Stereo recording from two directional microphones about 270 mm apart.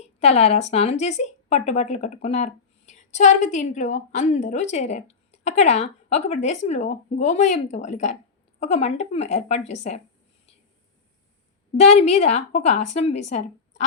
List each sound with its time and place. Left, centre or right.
0.2 s speech: left
11.8 s speech: left